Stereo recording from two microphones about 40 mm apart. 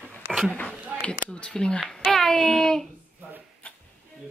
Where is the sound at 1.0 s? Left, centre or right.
Left.